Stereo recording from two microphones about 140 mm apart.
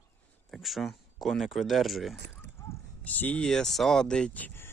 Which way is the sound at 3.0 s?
10° left (ahead or behind).